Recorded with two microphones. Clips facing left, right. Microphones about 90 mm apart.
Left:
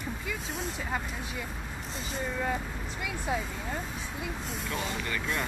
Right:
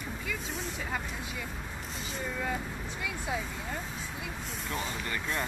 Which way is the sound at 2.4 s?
15° left (ahead or behind).